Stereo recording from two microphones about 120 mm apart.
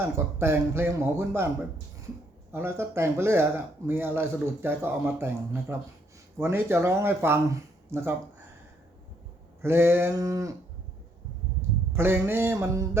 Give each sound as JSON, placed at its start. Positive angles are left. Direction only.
{"t": 0.0, "sound": "speech", "side_deg": -20}
{"t": 2.5, "sound": "speech", "side_deg": -20}
{"t": 9.6, "sound": "speech", "side_deg": -20}
{"t": 11.9, "sound": "speech", "side_deg": -20}